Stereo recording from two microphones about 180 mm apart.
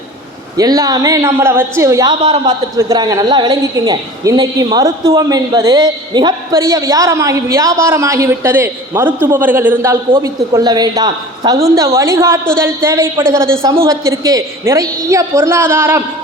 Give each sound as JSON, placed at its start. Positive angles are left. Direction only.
{"t": 0.5, "sound": "a woman's voice", "side_deg": -20}